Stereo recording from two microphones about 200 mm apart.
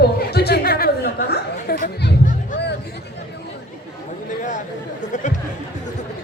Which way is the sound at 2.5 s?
55° left (ahead or behind).